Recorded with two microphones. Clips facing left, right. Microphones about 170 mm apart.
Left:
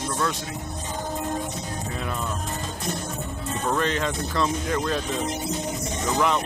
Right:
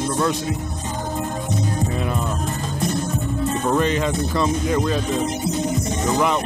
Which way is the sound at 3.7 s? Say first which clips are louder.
Right 3 dB; 10° right (ahead or behind).